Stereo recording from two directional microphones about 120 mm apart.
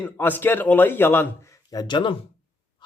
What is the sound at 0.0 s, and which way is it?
A man's voice, 15° left (ahead or behind).